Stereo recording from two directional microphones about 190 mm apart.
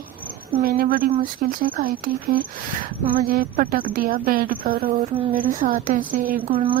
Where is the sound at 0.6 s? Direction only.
50° right (ahead or behind).